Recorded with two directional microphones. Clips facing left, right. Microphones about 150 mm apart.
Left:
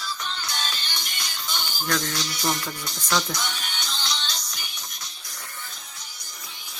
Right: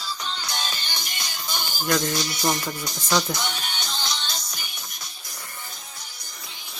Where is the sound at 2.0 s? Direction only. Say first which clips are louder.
Right 4 dB; 15° right (ahead or behind).